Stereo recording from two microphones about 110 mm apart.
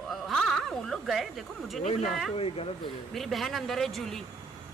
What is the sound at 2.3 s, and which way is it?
Speech, 60° left (ahead or behind).